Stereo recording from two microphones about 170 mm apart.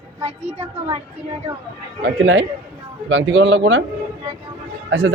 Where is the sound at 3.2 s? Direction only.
90° right.